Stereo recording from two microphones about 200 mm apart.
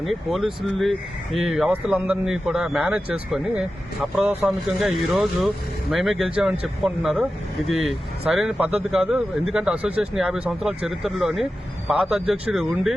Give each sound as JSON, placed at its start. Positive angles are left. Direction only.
{"t": 0.0, "sound": "speech", "side_deg": 0}